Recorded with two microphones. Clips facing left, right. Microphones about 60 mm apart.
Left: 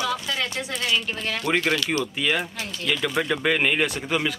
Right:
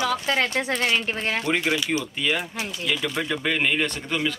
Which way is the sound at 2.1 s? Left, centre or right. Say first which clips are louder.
Left 1 dB; centre.